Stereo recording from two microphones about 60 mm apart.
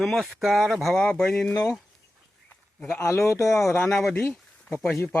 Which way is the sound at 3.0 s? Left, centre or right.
Left.